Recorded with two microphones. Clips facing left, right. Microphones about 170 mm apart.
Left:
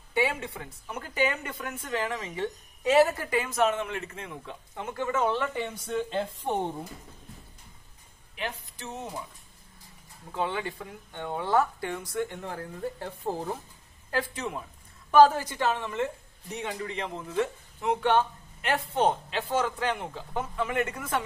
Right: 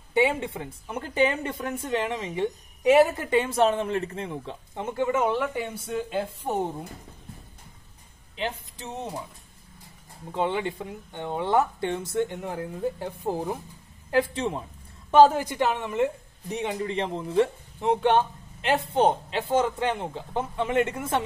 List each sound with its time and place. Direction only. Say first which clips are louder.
0.1 s a woman's voice: right 5 dB; 20° right (ahead or behind)
8.4 s a woman's voice: right 4 dB; 25° right (ahead or behind)
10.3 s a woman's voice: right 4 dB; 20° right (ahead or behind)
14.1 s a woman's voice: right 7 dB; 25° right (ahead or behind)